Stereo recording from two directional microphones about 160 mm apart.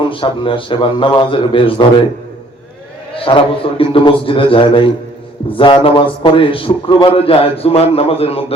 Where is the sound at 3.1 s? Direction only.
35° left (ahead or behind).